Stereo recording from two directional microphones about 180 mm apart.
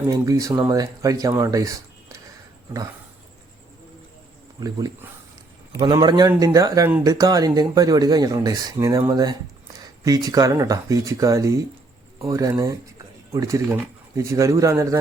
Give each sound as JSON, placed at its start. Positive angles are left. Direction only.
{"t": 0.1, "sound": "speech", "side_deg": -20}
{"t": 4.6, "sound": "speech", "side_deg": -20}
{"t": 5.8, "sound": "a man's voice", "side_deg": -25}